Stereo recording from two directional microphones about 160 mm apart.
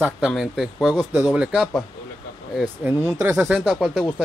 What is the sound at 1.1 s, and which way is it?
Speech, 10° right (ahead or behind).